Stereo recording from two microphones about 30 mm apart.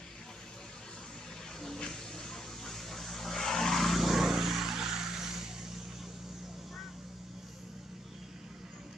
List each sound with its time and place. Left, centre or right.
1.8 s vehicle: centre
4.0 s vehicle: centre